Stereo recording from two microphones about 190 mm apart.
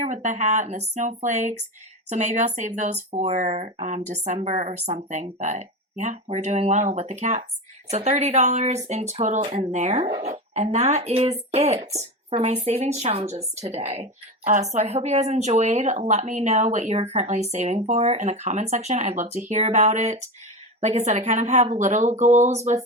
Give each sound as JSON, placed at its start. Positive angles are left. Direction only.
{"t": 0.0, "sound": "speech", "side_deg": -40}